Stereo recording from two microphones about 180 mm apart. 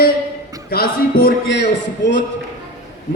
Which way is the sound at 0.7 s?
55° left (ahead or behind).